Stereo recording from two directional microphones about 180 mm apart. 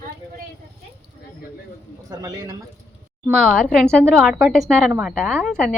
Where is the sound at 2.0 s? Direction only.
20° right (ahead or behind).